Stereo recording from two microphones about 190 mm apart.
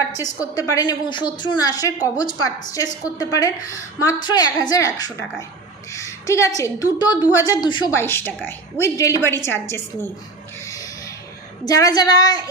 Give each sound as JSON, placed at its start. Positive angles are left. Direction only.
{"t": 0.2, "sound": "a woman's voice", "side_deg": 20}
{"t": 7.9, "sound": "a woman's voice", "side_deg": 10}
{"t": 10.7, "sound": "a sound", "side_deg": 15}
{"t": 11.6, "sound": "a woman's voice", "side_deg": 20}